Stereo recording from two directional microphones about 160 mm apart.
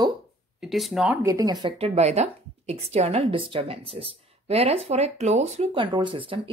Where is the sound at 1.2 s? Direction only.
20° right (ahead or behind).